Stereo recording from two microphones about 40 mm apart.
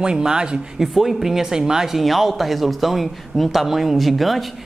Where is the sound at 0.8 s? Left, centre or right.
Centre.